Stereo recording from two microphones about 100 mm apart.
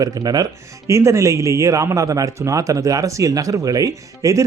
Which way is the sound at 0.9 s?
30° right (ahead or behind).